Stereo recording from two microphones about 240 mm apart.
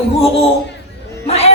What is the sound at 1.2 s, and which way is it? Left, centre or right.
Speech, left.